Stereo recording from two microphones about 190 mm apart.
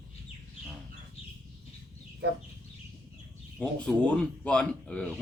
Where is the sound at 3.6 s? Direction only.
5° left (ahead or behind).